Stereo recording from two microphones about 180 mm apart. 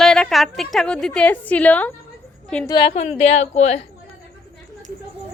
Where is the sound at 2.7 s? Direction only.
25° left (ahead or behind).